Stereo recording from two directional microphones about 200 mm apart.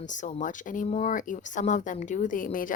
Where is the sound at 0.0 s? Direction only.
40° left (ahead or behind).